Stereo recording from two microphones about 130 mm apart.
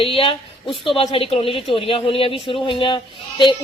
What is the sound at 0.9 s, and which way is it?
A woman's voice, 45° left (ahead or behind).